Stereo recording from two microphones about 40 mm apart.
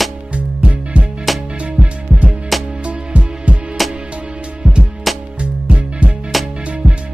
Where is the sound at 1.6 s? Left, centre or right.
Right.